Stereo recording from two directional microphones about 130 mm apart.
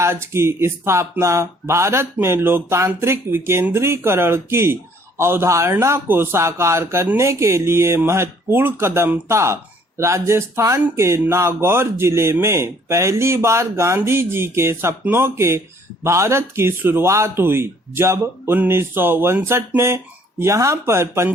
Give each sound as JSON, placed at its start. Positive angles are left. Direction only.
{"t": 0.0, "sound": "speech", "side_deg": -20}